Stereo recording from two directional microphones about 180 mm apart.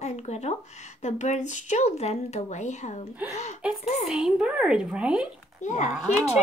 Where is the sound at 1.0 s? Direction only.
40° left (ahead or behind).